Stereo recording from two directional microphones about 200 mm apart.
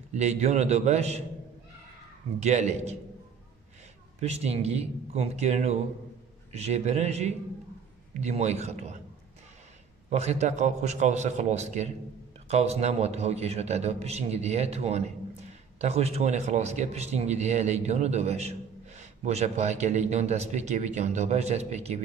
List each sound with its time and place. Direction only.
0.1 s a man's voice: 35° right (ahead or behind)
2.4 s a man's voice: 35° right (ahead or behind)
4.2 s a man's voice: 30° right (ahead or behind)
10.0 s a man's voice: 35° right (ahead or behind)